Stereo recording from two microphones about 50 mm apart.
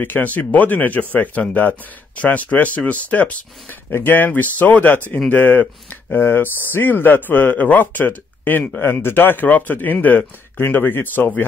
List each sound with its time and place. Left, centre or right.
0.0 s speech: left
3.9 s speech: left